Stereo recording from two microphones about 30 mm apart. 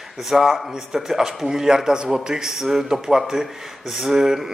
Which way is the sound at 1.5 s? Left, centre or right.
Centre.